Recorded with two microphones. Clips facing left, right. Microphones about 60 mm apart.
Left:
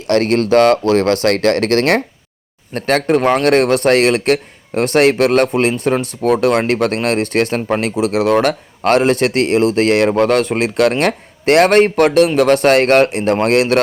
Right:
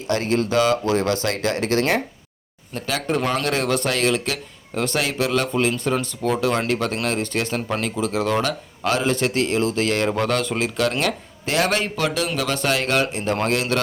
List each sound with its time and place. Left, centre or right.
0.1 s speech: left
7.8 s speech: left